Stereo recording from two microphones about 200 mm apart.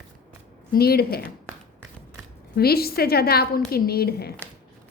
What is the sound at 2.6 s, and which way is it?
A woman's voice, 50° left (ahead or behind).